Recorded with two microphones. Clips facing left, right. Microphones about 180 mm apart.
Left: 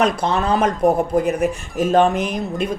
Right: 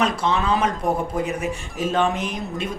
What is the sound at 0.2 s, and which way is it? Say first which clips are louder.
Speech: left 3 dB; 45° left (ahead or behind).